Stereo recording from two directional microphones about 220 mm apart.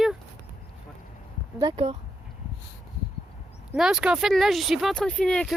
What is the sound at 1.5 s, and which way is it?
Speech, 25° right (ahead or behind).